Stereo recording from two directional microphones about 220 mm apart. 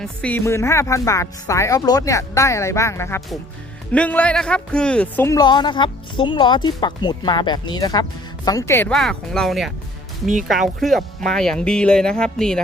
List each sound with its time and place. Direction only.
0.0 s a man's voice: 5° left (ahead or behind)